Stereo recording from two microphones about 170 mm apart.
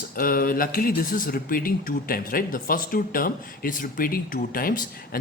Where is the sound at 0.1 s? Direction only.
60° left (ahead or behind).